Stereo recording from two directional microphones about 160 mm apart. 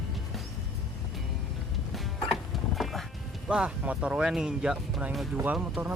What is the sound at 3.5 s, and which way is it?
Speech, 5° right (ahead or behind).